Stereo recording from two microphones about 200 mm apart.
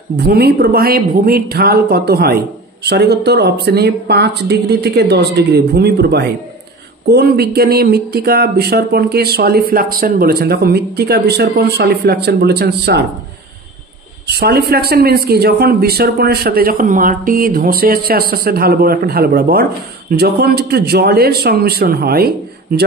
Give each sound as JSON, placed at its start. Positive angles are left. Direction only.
{"t": 0.3, "sound": "speech", "side_deg": -50}
{"t": 14.2, "sound": "speech", "side_deg": -55}